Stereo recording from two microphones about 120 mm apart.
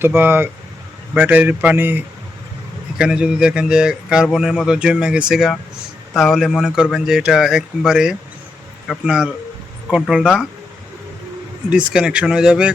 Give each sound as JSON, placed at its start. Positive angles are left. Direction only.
{"t": 0.0, "sound": "speech", "side_deg": -20}
{"t": 3.0, "sound": "speech", "side_deg": -5}
{"t": 11.7, "sound": "speech", "side_deg": -10}